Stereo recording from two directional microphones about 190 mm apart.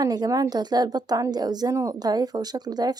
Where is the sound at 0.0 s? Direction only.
20° right (ahead or behind).